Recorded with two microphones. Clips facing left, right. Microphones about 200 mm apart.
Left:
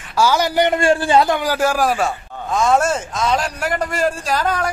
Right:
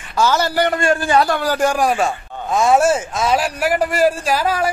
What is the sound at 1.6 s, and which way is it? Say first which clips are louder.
Speech: right 1 dB; centre (ahead or behind).